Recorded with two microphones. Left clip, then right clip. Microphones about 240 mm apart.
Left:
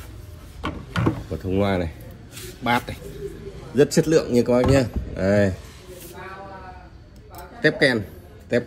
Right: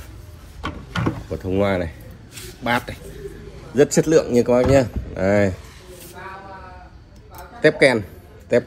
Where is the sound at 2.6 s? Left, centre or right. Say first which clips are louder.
Right 1 dB; left.